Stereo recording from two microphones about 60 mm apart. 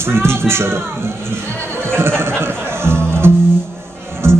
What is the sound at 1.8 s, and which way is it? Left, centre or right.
Music, right.